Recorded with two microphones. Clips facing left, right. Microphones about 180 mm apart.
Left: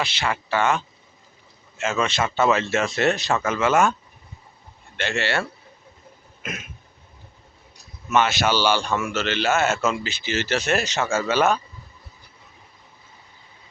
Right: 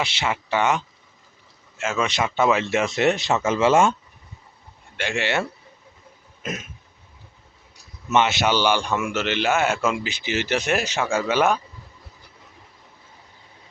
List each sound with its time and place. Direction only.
0.0 s speech: 20° right (ahead or behind)
1.8 s speech: 10° right (ahead or behind); by 3.9 s 30° right (ahead or behind)
4.9 s speech: 15° right (ahead or behind)
8.1 s speech: 20° right (ahead or behind)